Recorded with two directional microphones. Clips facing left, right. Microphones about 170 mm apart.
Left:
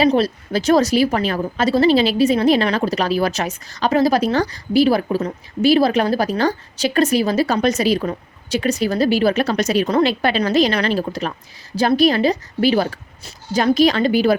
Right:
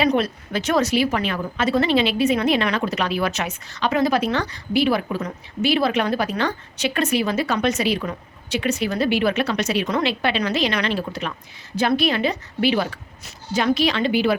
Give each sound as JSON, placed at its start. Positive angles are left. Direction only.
{"t": 0.1, "sound": "speech", "side_deg": 35}